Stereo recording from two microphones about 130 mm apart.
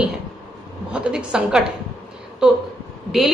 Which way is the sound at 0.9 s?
5° right (ahead or behind).